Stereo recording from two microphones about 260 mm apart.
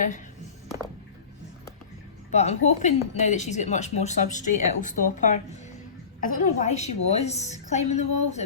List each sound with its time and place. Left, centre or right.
2.3 s a woman's voice: left